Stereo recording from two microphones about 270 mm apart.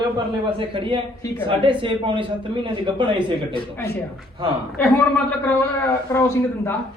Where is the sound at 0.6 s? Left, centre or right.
Centre.